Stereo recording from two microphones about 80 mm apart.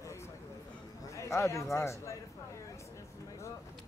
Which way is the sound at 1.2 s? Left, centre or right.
Left.